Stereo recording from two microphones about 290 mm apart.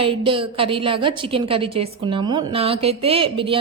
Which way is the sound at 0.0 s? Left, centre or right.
Centre.